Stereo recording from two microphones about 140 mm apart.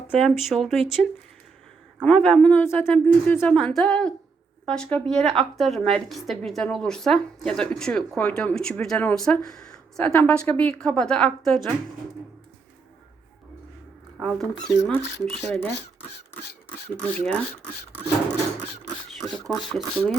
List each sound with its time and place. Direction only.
0.1 s a woman's voice: centre (ahead or behind)
2.0 s a woman's voice: 5° left (ahead or behind)
14.2 s a woman's voice: centre (ahead or behind)
15.4 s a woman's voice: 20° left (ahead or behind)
19.2 s a woman's voice: centre (ahead or behind)